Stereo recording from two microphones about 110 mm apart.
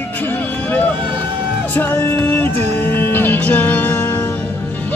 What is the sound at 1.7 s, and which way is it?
Music, 15° left (ahead or behind).